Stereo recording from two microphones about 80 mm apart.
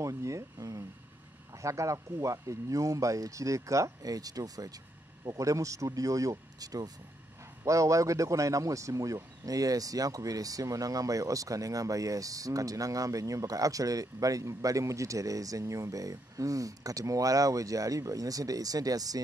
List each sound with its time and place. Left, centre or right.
0.0 s speech: right
7.6 s speech: right